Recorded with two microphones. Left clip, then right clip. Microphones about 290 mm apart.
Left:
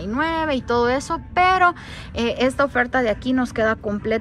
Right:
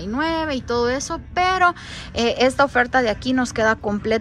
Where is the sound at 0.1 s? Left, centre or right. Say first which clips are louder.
Left 1 dB; centre.